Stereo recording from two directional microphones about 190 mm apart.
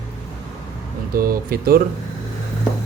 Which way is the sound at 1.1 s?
50° right (ahead or behind).